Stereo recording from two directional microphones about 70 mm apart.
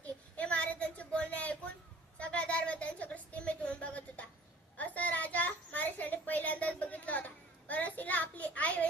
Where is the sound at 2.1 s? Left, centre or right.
Centre.